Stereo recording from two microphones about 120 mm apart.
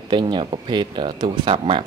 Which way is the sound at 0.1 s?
40° right (ahead or behind).